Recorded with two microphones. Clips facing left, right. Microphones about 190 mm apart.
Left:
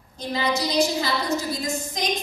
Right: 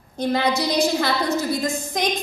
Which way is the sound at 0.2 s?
60° right (ahead or behind).